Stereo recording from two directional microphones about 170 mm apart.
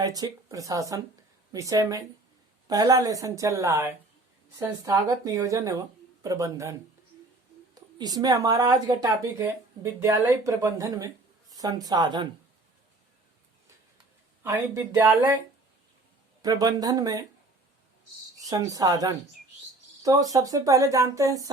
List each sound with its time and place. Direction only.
0.0 s speech: 20° right (ahead or behind)
7.9 s speech: 25° right (ahead or behind)
14.4 s speech: 15° right (ahead or behind)
16.4 s speech: 20° right (ahead or behind)
18.3 s speech: 20° right (ahead or behind)